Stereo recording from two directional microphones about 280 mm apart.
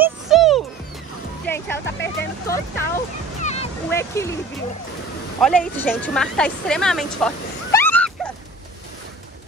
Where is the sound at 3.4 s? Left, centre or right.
Left.